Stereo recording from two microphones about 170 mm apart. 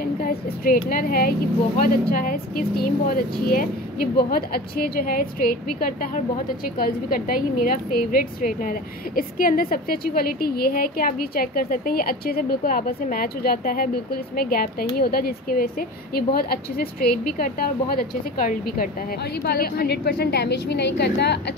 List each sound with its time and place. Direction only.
0.2 s a woman's voice: 60° left (ahead or behind); by 21.4 s 80° left